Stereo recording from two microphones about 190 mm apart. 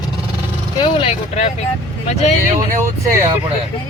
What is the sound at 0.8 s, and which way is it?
Speech, 30° left (ahead or behind).